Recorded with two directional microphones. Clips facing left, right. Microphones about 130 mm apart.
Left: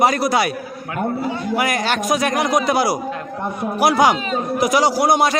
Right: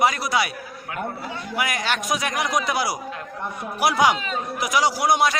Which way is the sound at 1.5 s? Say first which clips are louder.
Left 4 dB; 40° left (ahead or behind).